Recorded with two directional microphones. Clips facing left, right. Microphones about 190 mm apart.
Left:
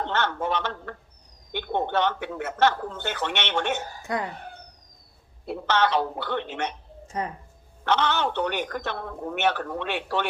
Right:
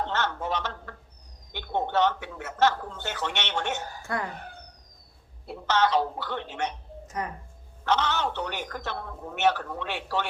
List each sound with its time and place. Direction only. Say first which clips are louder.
0.1 s a sound: left 3 dB; 60° left (ahead or behind)
1.5 s speech: left 1 dB; 60° left (ahead or behind)
4.0 s speech: left 2 dB; 20° left (ahead or behind)
5.5 s speech: left 1 dB; 60° left (ahead or behind)
7.9 s speech: left 2 dB; 60° left (ahead or behind)